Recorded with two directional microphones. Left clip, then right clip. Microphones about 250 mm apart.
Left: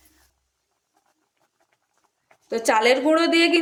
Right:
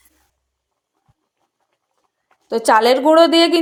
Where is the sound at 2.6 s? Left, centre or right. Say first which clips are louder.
Right 6 dB; centre.